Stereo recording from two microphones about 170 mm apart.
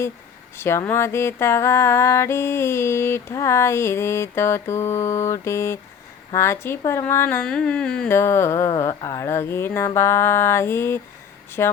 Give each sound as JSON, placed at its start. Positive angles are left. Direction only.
{"t": 0.5, "sound": "speech", "side_deg": 15}